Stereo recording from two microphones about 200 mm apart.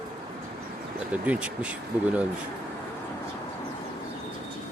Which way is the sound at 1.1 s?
5° right (ahead or behind).